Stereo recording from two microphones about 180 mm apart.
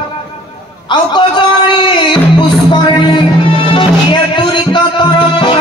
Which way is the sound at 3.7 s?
25° left (ahead or behind).